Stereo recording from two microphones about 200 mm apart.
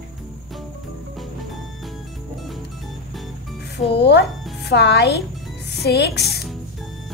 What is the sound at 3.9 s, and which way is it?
Speech, 55° left (ahead or behind).